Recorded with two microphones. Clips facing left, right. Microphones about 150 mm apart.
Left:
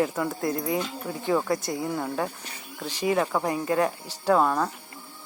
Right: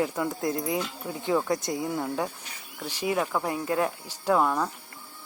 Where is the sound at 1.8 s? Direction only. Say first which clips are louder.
Left 1 dB; centre (ahead or behind).